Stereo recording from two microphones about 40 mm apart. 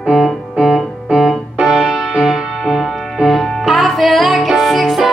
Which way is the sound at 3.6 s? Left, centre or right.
Centre.